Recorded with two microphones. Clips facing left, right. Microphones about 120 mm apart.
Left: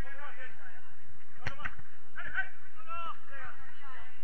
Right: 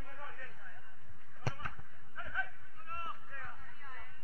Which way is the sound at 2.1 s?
30° right (ahead or behind).